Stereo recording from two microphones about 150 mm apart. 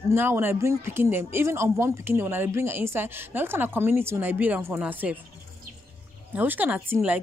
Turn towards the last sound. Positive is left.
turn(degrees=-10)  # may be behind; listen again after turning